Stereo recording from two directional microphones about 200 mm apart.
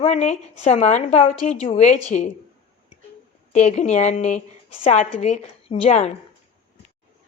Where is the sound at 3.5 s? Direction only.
35° left (ahead or behind).